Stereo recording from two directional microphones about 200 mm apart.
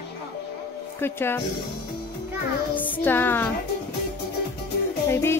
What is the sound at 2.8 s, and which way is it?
Music, 10° left (ahead or behind).